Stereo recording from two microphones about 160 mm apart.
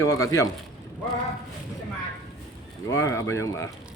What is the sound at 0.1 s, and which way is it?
Speech, 20° left (ahead or behind).